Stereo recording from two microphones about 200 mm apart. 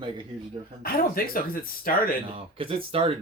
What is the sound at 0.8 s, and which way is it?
Speech, 45° left (ahead or behind).